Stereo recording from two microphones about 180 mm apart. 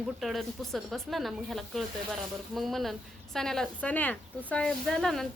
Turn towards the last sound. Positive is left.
turn(degrees=0)  # may be behind; listen again after turning